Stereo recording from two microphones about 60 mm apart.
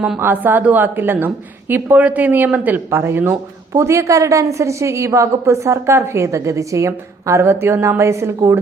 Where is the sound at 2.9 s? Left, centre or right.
Right.